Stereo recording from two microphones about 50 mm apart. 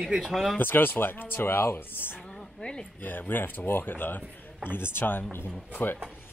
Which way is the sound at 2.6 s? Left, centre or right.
Centre.